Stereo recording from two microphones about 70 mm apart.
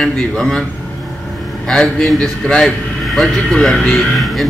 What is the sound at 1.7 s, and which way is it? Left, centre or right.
A man's voice, centre.